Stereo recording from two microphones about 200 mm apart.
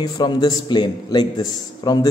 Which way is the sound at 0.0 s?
20° left (ahead or behind).